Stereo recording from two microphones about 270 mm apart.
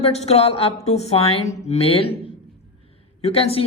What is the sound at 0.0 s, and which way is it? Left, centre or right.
Speech, left.